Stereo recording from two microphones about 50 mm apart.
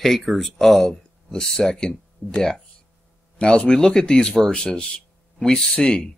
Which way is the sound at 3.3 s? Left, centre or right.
Left.